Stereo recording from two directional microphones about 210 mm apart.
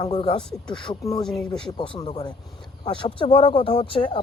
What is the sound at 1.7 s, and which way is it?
Speech, 25° left (ahead or behind).